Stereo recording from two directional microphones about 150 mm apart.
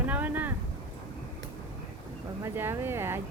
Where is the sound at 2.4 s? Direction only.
15° right (ahead or behind).